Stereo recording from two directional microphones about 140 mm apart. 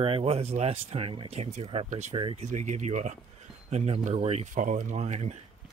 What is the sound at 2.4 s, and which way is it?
Speech, 55° right (ahead or behind).